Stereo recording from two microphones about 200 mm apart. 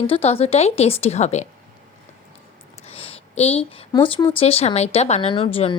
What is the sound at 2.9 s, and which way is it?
Speech, 30° left (ahead or behind).